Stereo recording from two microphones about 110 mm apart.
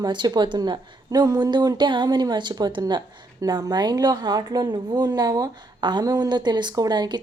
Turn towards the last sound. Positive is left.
turn(degrees=-40)  # may be behind; listen again after turning